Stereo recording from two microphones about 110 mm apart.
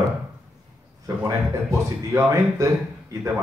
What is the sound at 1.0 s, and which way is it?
A man's voice, 30° right (ahead or behind).